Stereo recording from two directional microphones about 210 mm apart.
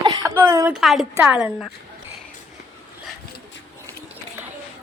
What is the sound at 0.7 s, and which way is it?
Speech, centre (ahead or behind).